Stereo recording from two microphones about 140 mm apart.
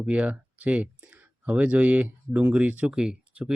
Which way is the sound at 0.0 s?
10° right (ahead or behind).